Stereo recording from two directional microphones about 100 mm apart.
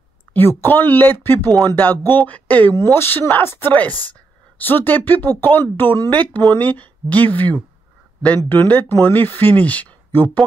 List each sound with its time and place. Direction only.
0.3 s speech: 20° left (ahead or behind)